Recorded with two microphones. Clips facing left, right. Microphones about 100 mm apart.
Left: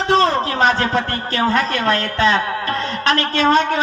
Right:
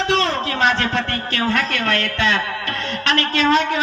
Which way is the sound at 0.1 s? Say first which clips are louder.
Left 9 dB; 40° left (ahead or behind).